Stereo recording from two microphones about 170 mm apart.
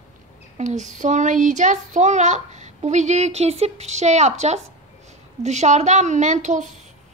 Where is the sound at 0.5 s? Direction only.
45° right (ahead or behind).